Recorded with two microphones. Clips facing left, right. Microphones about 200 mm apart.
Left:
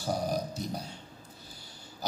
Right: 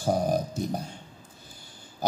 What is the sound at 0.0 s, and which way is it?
Burping, 50° right (ahead or behind).